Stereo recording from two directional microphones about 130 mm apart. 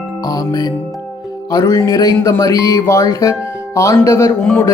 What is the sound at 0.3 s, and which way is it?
Speech, 30° left (ahead or behind).